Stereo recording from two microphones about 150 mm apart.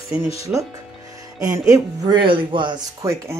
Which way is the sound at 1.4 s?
20° right (ahead or behind).